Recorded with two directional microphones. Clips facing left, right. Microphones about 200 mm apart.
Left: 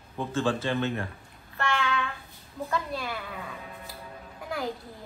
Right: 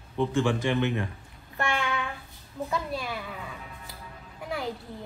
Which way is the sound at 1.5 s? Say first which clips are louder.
Even; 15° right (ahead or behind).